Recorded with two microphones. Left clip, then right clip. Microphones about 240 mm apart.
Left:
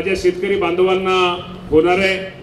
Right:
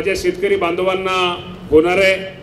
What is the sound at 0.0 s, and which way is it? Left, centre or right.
A man's voice, right.